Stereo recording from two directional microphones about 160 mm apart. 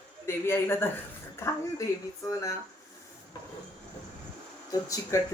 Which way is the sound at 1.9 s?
20° left (ahead or behind).